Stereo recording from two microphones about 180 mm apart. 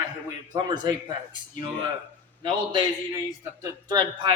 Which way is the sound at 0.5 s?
25° right (ahead or behind).